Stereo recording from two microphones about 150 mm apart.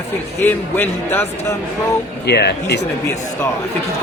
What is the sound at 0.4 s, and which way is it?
Speech, 15° left (ahead or behind).